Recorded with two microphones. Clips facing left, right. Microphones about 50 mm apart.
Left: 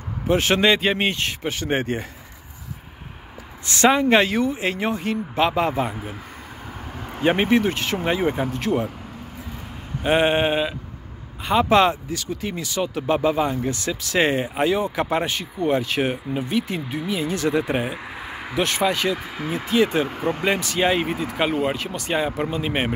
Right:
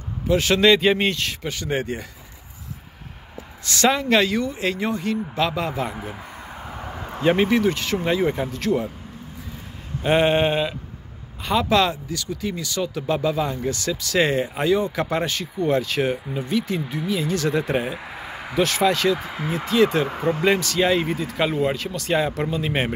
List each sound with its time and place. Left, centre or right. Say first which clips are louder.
0.3 s speech: even; left
0.7 s speech: right 5 dB; centre
1.1 s speech: left 2 dB; left
3.6 s speech: left 3 dB; left
7.2 s speech: even; left
10.0 s speech: even; centre
11.4 s speech: left 3 dB; left
19.1 s speech: right 1 dB; centre
19.5 s speech: right 1 dB; left